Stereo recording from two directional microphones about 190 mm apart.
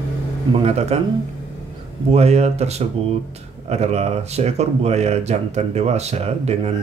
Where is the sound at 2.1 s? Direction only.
35° right (ahead or behind).